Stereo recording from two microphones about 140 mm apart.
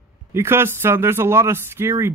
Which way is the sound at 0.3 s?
15° right (ahead or behind).